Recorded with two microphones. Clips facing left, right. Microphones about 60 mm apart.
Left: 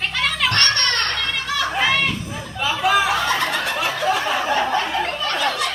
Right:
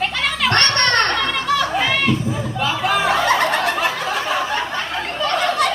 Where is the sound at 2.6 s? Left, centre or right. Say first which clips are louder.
Left 1 dB; centre.